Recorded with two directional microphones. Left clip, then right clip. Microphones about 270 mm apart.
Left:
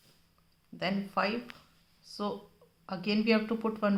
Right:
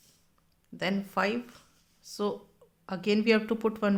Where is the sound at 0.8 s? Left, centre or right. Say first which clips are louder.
Right 2 dB; right.